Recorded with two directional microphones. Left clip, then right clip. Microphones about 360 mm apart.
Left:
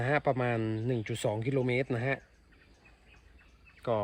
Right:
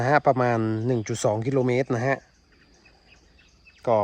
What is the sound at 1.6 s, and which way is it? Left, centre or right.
Speech, right.